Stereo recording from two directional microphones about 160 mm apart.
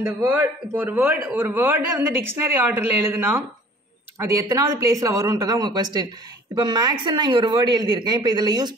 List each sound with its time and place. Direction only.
0.0 s a man's voice: 10° right (ahead or behind)